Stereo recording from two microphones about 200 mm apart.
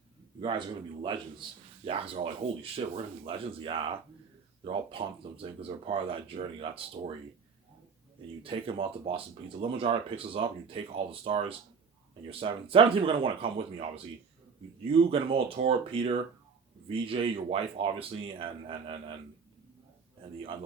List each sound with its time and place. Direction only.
1.0 s speech: 25° right (ahead or behind)
8.4 s speech: 25° right (ahead or behind)